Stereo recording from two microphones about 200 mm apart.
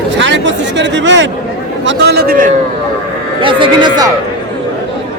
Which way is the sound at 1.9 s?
55° right (ahead or behind).